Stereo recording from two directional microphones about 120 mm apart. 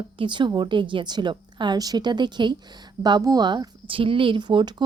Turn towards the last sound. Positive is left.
turn(degrees=-40)  # may be behind; listen again after turning